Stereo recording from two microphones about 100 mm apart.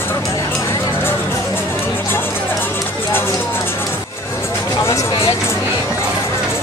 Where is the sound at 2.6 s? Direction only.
20° left (ahead or behind).